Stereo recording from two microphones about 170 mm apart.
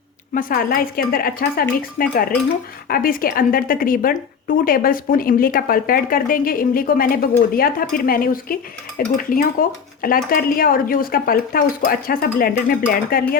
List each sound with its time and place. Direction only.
0.3 s a woman's voice: 55° left (ahead or behind)